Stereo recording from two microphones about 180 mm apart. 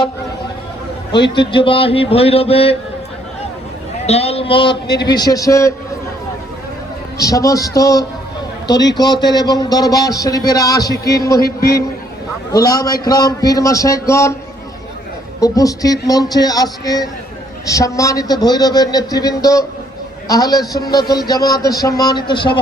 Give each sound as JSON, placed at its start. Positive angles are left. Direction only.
{"t": 1.4, "sound": "speech", "side_deg": 30}
{"t": 4.0, "sound": "a man's voice", "side_deg": 35}
{"t": 7.2, "sound": "a man's voice", "side_deg": 20}
{"t": 11.4, "sound": "a man's voice", "side_deg": 60}
{"t": 12.5, "sound": "a man's voice", "side_deg": 20}
{"t": 15.4, "sound": "a man's voice", "side_deg": 20}